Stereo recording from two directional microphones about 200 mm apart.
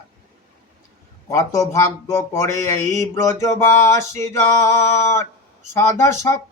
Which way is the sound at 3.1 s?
15° left (ahead or behind).